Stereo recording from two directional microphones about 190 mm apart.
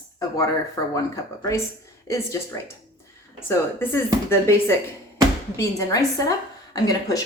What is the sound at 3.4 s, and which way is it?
A woman's voice, 10° left (ahead or behind).